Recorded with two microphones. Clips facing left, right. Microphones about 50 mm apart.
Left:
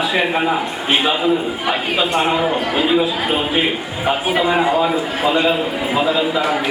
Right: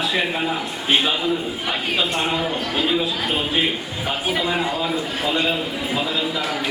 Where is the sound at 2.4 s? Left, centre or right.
Centre.